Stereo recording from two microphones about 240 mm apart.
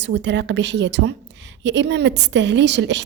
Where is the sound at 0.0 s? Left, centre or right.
Right.